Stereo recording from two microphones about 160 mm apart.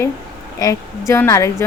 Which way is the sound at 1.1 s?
15° left (ahead or behind).